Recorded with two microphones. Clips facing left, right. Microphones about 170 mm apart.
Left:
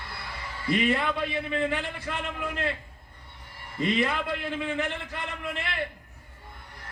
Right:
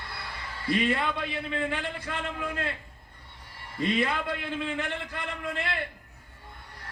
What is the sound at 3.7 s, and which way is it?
A man's voice, 20° left (ahead or behind).